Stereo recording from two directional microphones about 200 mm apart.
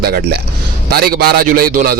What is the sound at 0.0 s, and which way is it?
A man's voice, 50° right (ahead or behind).